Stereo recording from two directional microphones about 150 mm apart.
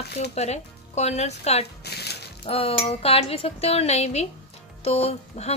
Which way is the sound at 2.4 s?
40° left (ahead or behind).